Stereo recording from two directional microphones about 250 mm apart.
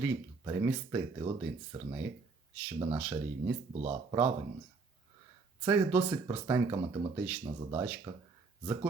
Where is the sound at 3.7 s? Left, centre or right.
Right.